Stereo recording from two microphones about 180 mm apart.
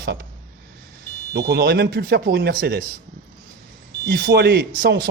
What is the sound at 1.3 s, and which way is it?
Speech, 65° right (ahead or behind).